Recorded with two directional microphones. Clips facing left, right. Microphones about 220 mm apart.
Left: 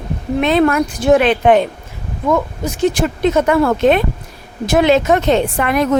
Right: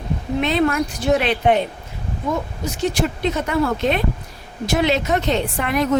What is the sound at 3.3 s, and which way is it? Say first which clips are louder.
Speech: left 9 dB; 90° left.